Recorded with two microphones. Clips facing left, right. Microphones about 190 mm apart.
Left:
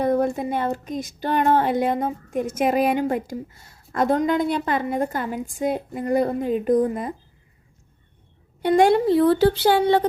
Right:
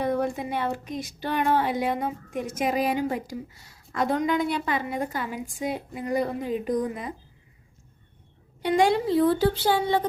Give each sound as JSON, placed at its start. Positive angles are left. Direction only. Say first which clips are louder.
{"t": 0.0, "sound": "speech", "louder": "left 5 dB", "side_deg": 45}
{"t": 8.6, "sound": "a woman's voice", "louder": "left 5 dB", "side_deg": 55}